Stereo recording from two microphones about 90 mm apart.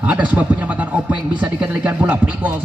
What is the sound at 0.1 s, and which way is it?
A man's voice, 15° right (ahead or behind).